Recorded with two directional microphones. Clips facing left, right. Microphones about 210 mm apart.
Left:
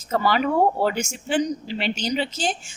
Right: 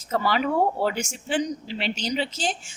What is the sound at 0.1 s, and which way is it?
A man's voice, 45° left (ahead or behind).